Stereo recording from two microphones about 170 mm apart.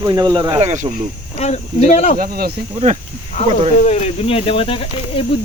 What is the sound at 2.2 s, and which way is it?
Speech, 65° right (ahead or behind).